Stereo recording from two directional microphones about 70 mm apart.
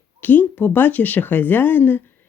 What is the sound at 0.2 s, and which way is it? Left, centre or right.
Speech, left.